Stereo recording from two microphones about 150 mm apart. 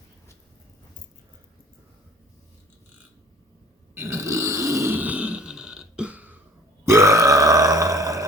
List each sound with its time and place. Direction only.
3.9 s burping: 20° right (ahead or behind)